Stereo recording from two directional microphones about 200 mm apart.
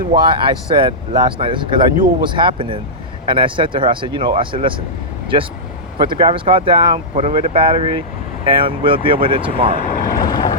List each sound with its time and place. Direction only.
0.2 s speech: 25° right (ahead or behind)
6.0 s speech: 25° right (ahead or behind)
9.7 s speech: 45° left (ahead or behind)
10.2 s boat: 20° left (ahead or behind)